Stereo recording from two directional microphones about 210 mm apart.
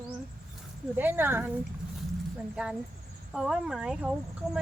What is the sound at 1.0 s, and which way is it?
Speech, 10° right (ahead or behind).